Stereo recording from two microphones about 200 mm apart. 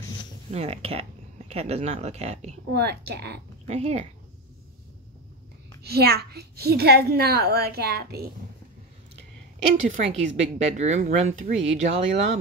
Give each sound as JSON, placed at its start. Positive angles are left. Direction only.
{"t": 0.5, "sound": "a woman's voice", "side_deg": -30}
{"t": 2.7, "sound": "a woman's voice", "side_deg": -55}
{"t": 3.6, "sound": "a woman's voice", "side_deg": -35}
{"t": 5.9, "sound": "a woman's voice", "side_deg": -50}
{"t": 9.9, "sound": "a woman's voice", "side_deg": -35}